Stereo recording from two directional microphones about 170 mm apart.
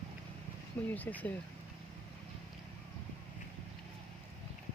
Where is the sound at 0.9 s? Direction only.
10° left (ahead or behind).